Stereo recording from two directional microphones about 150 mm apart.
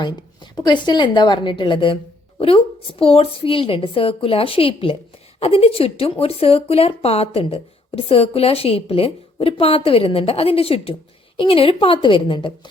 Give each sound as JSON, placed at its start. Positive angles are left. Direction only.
{"t": 0.5, "sound": "speech", "side_deg": 30}